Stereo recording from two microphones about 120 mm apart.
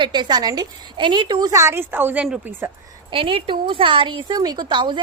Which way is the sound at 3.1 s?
50° right (ahead or behind).